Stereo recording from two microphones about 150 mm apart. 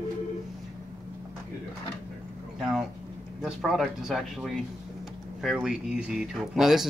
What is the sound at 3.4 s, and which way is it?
Speech, centre (ahead or behind).